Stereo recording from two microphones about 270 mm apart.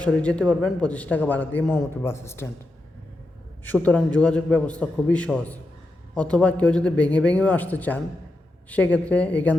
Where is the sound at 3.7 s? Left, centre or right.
Centre.